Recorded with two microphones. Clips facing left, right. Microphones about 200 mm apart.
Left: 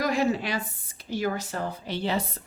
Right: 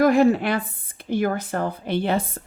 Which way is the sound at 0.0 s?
55° right (ahead or behind).